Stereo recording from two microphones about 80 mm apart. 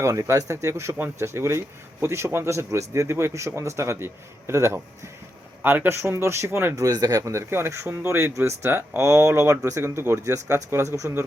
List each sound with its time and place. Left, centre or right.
0.0 s speech: right
6.7 s speech: right